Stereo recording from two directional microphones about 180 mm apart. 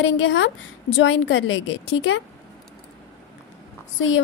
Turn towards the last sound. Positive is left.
turn(degrees=90)